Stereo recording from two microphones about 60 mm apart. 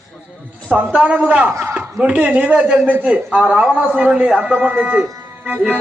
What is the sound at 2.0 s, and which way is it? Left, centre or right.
A man's voice, right.